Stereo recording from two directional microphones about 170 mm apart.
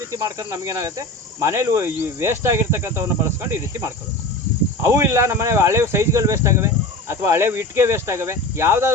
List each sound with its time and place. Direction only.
0.1 s cricket: 20° right (ahead or behind)